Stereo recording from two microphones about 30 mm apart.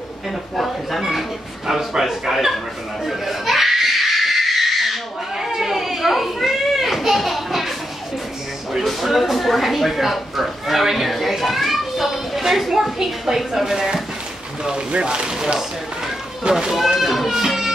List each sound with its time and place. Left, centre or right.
0.6 s a man's voice: centre
2.3 s speech: centre
3.1 s laughter: centre
5.4 s children playing: centre
8.8 s a man's voice: centre
14.9 s speech: right
15.3 s a man's voice: centre
16.7 s speech: centre
17.5 s music: centre